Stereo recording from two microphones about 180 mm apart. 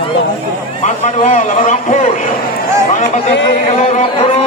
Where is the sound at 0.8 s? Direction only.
40° left (ahead or behind).